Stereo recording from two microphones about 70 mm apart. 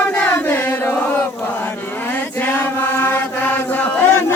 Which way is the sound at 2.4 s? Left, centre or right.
Left.